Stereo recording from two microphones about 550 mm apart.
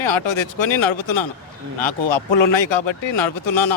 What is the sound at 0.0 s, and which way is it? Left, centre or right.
Speech, left.